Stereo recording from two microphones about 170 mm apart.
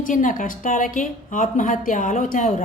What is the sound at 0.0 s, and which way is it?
A woman's voice, 50° left (ahead or behind).